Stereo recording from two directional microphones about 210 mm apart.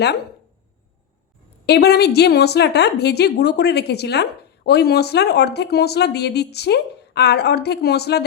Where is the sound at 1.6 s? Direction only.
50° left (ahead or behind).